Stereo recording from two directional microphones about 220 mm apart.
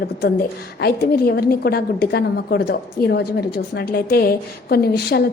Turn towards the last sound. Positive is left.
turn(degrees=45)  # may be behind; listen again after turning